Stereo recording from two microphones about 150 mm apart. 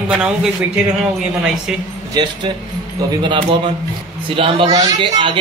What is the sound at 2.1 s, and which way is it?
A man's voice, 30° right (ahead or behind).